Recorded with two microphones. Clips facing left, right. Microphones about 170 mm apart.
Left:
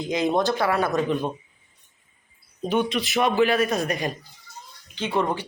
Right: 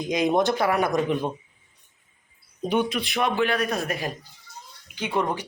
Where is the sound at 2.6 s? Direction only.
10° right (ahead or behind).